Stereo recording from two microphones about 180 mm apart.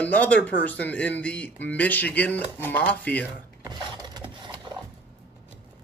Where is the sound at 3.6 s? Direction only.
25° right (ahead or behind).